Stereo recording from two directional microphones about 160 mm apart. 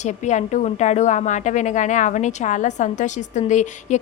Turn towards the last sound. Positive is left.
turn(degrees=50)  # may be behind; listen again after turning